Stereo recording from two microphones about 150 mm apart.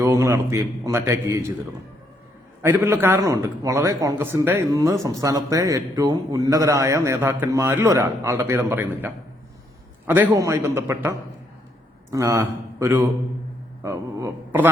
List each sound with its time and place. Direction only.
0.0 s a man's voice: 20° right (ahead or behind)
2.6 s a man's voice: 15° right (ahead or behind)
12.1 s a man's voice: 20° right (ahead or behind)
13.8 s a sound: 20° right (ahead or behind)